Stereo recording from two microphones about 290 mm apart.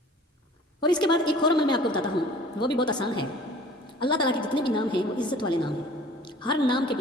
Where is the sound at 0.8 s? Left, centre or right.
Centre.